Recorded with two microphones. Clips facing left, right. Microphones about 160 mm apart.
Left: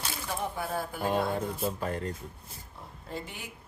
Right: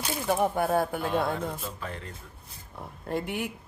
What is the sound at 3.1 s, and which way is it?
Speech, 60° right (ahead or behind).